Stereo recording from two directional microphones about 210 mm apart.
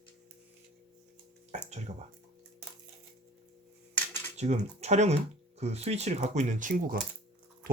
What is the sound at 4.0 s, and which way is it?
Cutlery, 10° left (ahead or behind).